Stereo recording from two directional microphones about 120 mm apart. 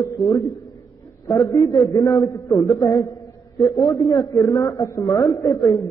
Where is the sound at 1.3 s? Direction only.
30° left (ahead or behind).